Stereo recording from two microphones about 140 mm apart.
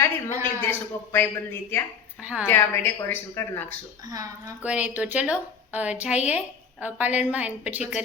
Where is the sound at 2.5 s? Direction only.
15° left (ahead or behind).